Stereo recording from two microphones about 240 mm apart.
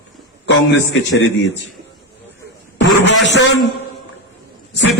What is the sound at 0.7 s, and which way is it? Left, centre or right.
Speech, left.